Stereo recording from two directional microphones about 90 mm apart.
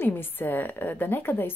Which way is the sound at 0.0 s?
25° left (ahead or behind).